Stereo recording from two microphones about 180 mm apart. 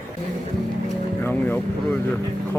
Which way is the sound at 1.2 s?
10° left (ahead or behind).